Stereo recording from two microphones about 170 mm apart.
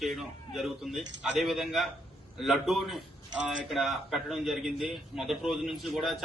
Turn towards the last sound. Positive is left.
turn(degrees=0)  # may be behind; listen again after turning